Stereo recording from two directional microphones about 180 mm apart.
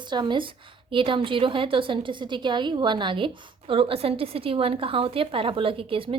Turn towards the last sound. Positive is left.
turn(degrees=-30)  # may be behind; listen again after turning